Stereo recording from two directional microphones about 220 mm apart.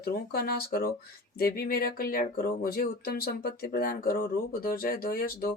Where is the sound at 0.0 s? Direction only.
45° left (ahead or behind).